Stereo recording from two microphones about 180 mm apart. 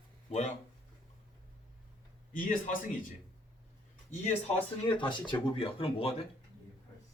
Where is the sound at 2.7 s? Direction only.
45° left (ahead or behind).